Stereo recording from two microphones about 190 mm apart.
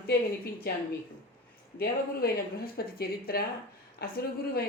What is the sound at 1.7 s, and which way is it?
A woman's voice, 55° left (ahead or behind).